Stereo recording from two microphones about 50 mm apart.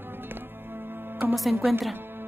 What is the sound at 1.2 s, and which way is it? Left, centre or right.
Music, right.